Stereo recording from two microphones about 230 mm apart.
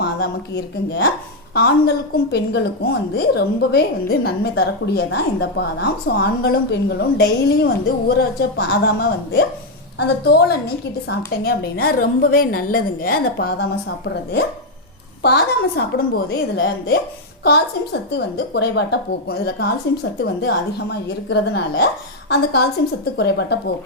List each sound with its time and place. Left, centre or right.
0.0 s a woman's voice: left
2.3 s a woman's voice: left
16.6 s speech: left
17.4 s a woman's voice: left
23.1 s a woman's voice: left